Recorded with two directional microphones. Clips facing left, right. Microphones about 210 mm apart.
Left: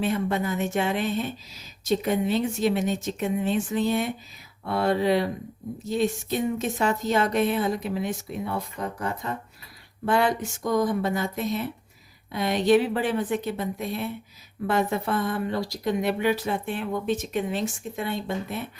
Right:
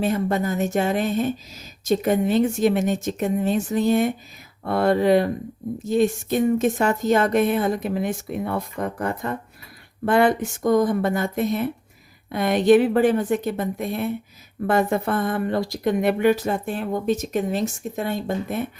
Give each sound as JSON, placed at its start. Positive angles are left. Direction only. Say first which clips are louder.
{"t": 0.0, "sound": "speech", "louder": "right 3 dB", "side_deg": -40}